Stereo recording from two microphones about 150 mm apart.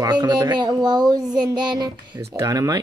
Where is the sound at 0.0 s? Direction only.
25° right (ahead or behind).